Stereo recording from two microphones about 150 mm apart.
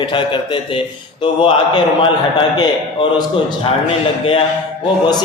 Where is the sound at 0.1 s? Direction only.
35° left (ahead or behind).